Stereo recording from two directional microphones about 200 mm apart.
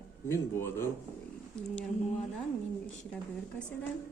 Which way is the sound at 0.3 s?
10° left (ahead or behind).